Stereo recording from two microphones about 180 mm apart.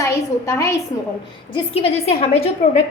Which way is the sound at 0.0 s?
15° left (ahead or behind).